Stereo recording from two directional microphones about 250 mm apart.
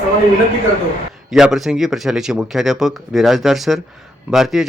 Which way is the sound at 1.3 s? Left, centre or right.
Centre.